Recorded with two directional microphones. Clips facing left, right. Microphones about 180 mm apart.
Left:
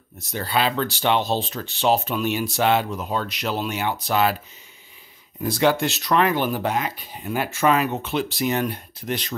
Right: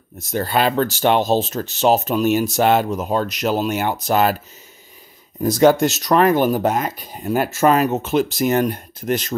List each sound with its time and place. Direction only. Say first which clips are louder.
0.2 s speech: right 5 dB; 45° right (ahead or behind)
5.4 s speech: right 7 dB; 45° right (ahead or behind)